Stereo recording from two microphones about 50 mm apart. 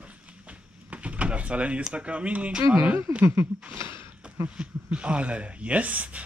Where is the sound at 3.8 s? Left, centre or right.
Right.